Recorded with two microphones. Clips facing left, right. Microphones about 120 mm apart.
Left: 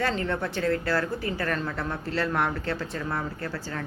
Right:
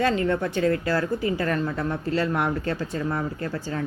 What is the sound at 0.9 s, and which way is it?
Speech, 15° right (ahead or behind).